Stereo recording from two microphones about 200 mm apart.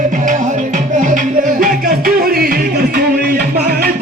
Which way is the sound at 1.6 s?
45° right (ahead or behind).